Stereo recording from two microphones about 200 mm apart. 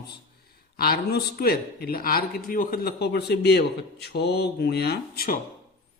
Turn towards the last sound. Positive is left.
turn(degrees=50)  # may be behind; listen again after turning